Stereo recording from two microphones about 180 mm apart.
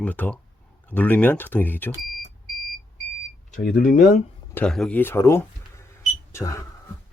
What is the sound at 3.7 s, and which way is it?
Speech, 45° left (ahead or behind).